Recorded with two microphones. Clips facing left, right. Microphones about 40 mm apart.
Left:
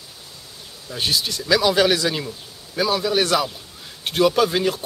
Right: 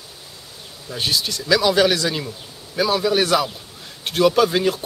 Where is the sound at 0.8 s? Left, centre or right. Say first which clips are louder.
Even; centre.